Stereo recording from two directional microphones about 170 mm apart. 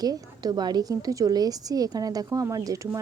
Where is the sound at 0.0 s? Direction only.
25° right (ahead or behind).